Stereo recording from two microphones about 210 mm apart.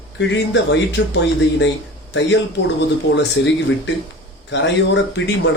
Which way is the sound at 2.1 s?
60° left (ahead or behind).